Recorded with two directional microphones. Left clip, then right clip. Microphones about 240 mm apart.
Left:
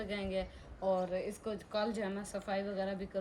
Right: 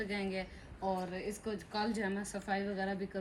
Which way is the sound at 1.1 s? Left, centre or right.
Left.